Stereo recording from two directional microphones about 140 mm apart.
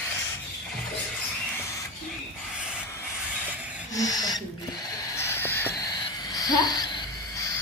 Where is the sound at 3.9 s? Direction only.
25° left (ahead or behind).